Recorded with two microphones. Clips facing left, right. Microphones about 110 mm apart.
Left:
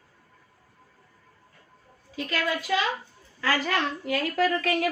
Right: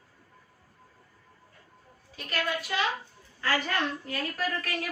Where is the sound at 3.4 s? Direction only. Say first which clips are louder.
Left 3 dB; 90° left.